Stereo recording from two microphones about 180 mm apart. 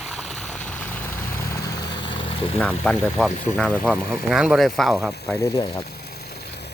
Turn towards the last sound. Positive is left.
turn(degrees=20)  # may be behind; listen again after turning